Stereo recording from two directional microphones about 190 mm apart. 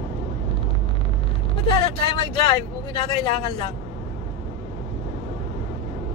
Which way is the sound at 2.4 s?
30° left (ahead or behind).